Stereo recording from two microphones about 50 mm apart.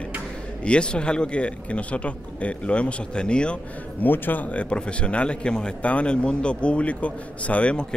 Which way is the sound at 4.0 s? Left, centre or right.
Left.